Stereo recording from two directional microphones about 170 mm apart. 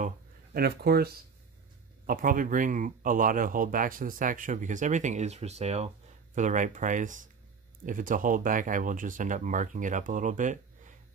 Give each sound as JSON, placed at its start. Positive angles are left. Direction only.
{"t": 0.6, "sound": "speech", "side_deg": -65}
{"t": 2.0, "sound": "speech", "side_deg": -55}